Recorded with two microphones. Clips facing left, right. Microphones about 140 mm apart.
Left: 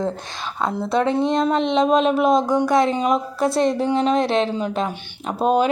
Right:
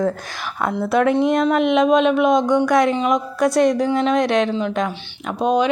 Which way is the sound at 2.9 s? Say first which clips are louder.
Right 1 dB; 40° left (ahead or behind).